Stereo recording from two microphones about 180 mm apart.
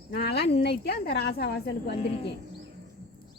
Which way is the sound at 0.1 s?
60° left (ahead or behind).